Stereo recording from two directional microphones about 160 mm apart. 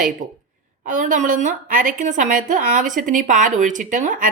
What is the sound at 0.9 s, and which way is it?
A woman's voice, 50° right (ahead or behind).